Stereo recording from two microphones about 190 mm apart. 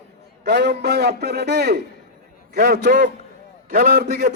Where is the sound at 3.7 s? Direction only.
40° right (ahead or behind).